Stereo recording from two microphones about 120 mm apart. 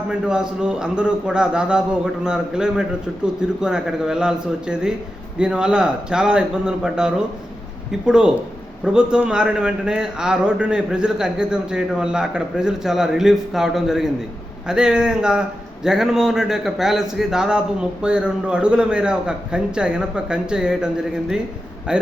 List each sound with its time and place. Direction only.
0.1 s a man's voice: 5° right (ahead or behind)